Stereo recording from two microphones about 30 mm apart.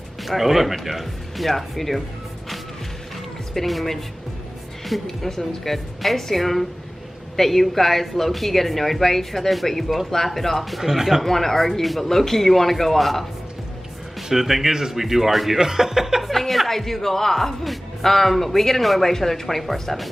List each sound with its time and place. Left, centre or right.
0.2 s speech: centre
3.5 s speech: centre
5.0 s speech: centre
10.8 s speech: centre
11.2 s speech: centre
14.3 s speech: centre
16.2 s speech: centre